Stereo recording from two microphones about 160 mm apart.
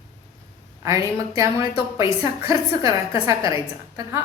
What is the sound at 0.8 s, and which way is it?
Speech, 20° right (ahead or behind).